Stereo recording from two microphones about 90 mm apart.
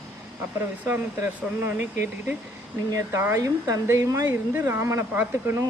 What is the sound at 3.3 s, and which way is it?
Speech, 40° right (ahead or behind).